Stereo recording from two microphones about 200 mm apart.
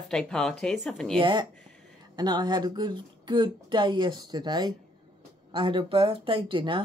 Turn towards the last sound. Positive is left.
turn(degrees=-25)  # may be behind; listen again after turning